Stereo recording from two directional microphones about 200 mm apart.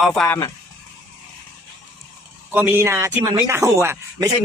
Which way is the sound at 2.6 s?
10° right (ahead or behind).